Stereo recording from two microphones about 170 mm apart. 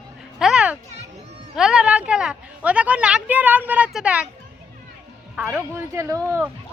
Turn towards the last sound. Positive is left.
turn(degrees=-15)  # may be behind; listen again after turning